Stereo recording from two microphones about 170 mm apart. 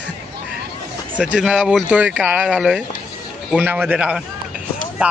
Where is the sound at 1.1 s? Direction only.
5° right (ahead or behind).